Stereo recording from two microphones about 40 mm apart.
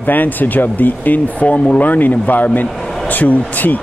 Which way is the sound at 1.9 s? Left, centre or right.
Left.